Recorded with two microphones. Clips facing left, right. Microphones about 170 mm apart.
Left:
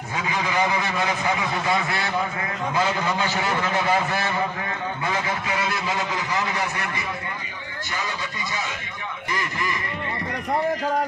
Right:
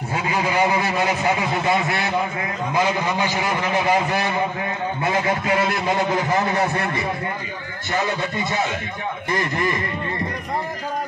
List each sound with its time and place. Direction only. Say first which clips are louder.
0.1 s a man's voice: right 3 dB; 30° right (ahead or behind)
5.5 s a man's voice: right 6 dB; 45° right (ahead or behind)
6.3 s a man's voice: right 6 dB; 30° right (ahead or behind)
7.9 s a man's voice: right 8 dB; 45° right (ahead or behind)